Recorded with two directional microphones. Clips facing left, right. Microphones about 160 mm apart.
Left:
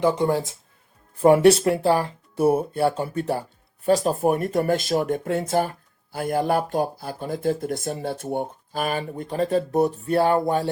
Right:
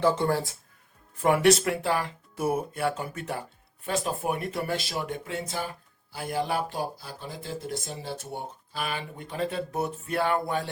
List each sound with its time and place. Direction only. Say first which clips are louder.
0.0 s speech: left 4 dB; 15° left (ahead or behind)
1.2 s speech: left 7 dB; 30° left (ahead or behind)